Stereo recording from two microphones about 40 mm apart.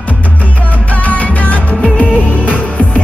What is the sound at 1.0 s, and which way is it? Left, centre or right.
Music, left.